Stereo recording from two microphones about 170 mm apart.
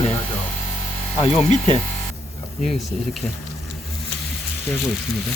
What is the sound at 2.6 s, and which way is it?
Speech, centre (ahead or behind).